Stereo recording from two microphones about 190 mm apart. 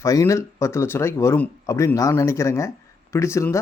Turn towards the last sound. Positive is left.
turn(degrees=15)  # may be behind; listen again after turning